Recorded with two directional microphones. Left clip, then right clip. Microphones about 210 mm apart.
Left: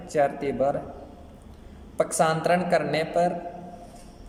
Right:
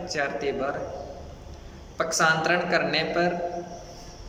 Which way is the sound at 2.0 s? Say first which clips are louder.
Right 1 dB; 35° left (ahead or behind).